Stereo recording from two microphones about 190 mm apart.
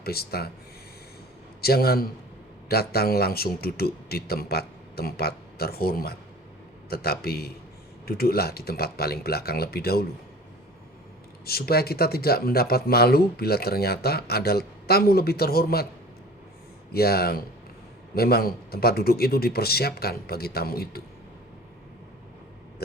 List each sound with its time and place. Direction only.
0.0 s speech: 55° left (ahead or behind)
1.6 s speech: 55° left (ahead or behind)
11.4 s speech: 55° left (ahead or behind)
16.9 s speech: 55° left (ahead or behind)